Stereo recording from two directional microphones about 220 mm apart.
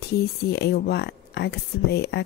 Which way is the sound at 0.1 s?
45° left (ahead or behind).